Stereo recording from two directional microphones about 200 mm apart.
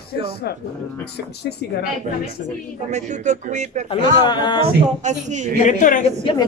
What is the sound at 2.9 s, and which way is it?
A man's voice, 35° right (ahead or behind).